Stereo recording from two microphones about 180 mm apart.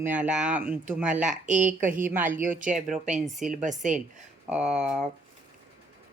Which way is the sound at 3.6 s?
45° right (ahead or behind).